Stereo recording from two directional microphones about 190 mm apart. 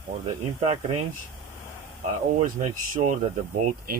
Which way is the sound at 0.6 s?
35° right (ahead or behind).